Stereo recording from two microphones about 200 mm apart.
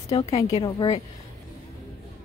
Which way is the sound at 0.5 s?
20° left (ahead or behind).